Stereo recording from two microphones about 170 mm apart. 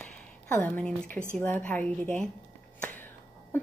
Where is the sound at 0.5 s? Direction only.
10° left (ahead or behind).